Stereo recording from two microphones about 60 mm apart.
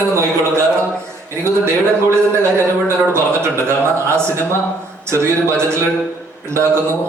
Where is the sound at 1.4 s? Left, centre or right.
Right.